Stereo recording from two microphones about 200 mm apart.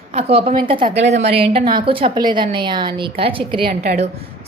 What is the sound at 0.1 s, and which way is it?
A woman's voice, 30° right (ahead or behind).